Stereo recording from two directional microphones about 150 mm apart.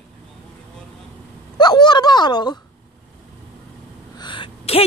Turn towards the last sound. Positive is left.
turn(degrees=35)  # may be behind; listen again after turning